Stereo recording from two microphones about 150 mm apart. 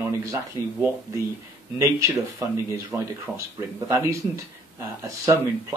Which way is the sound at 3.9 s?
20° right (ahead or behind).